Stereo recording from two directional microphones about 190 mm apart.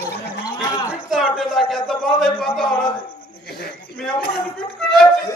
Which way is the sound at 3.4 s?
55° left (ahead or behind).